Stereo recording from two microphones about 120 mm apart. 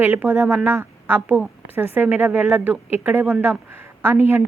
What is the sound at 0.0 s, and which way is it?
A woman's voice, 15° right (ahead or behind).